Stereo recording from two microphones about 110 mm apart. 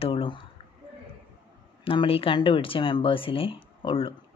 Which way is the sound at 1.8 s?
55° left (ahead or behind).